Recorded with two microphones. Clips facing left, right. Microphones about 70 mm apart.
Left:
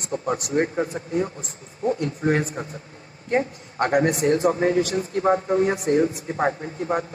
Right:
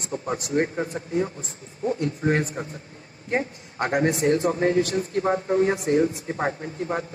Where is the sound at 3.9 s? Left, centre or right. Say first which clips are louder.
Left 1 dB; left.